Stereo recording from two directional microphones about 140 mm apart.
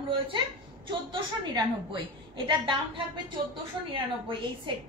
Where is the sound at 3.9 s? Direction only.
35° right (ahead or behind).